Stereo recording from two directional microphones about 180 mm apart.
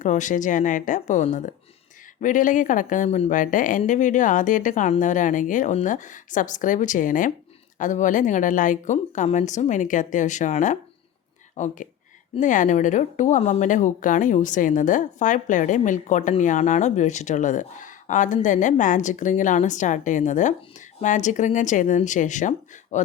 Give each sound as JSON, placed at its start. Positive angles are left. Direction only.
{"t": 0.0, "sound": "speech", "side_deg": 45}